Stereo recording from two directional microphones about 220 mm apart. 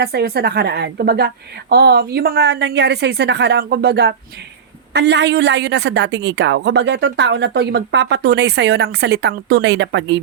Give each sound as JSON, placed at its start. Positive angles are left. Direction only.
{"t": 0.0, "sound": "a woman's voice", "side_deg": -45}